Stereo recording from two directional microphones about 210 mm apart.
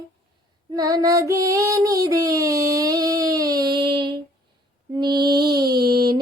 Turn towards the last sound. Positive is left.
turn(degrees=-20)  # may be behind; listen again after turning